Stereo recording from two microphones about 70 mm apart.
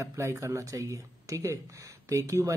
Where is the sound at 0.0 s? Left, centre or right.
Right.